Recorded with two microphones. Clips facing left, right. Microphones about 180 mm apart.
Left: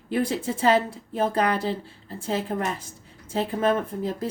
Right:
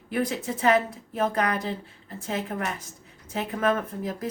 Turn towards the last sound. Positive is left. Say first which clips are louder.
# left 3 dB
turn(degrees=30)  # may be behind; listen again after turning